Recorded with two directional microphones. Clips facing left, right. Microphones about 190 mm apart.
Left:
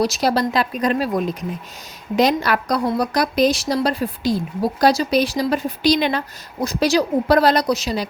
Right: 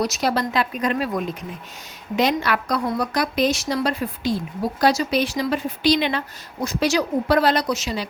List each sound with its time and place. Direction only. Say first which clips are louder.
0.0 s a woman's voice: left 3 dB; 35° left (ahead or behind)